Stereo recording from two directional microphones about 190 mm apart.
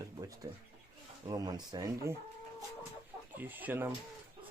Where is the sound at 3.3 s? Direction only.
10° right (ahead or behind).